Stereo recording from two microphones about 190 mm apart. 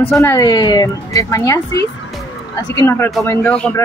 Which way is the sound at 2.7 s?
15° left (ahead or behind).